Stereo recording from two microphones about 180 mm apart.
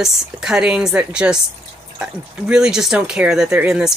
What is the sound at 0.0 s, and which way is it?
Speech, 5° right (ahead or behind).